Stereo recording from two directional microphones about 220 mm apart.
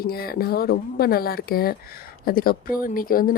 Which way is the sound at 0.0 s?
45° left (ahead or behind).